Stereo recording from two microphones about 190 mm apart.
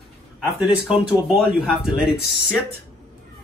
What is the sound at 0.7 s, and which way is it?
Speech, 5° right (ahead or behind).